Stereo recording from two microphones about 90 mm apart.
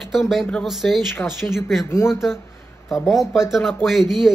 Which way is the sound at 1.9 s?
30° left (ahead or behind).